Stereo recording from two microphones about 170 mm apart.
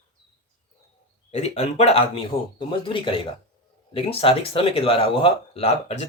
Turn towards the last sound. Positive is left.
turn(degrees=40)  # may be behind; listen again after turning